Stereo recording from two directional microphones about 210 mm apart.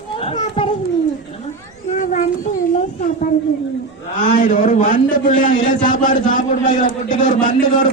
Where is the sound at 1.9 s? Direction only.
35° left (ahead or behind).